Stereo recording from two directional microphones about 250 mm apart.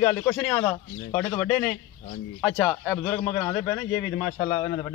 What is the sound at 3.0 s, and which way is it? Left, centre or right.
A man's voice, centre.